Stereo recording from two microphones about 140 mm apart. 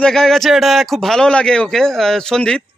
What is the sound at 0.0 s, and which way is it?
Speech, 5° left (ahead or behind).